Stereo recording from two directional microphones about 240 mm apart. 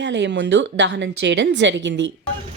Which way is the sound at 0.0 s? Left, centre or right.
Right.